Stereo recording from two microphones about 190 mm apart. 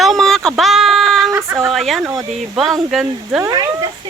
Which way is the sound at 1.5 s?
Centre (ahead or behind).